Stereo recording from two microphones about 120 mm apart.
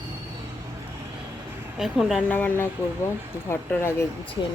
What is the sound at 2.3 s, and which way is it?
Speech, 15° left (ahead or behind).